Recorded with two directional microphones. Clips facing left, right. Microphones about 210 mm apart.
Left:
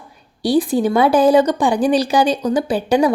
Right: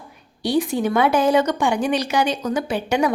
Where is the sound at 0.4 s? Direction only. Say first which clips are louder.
Left 4 dB; 35° left (ahead or behind).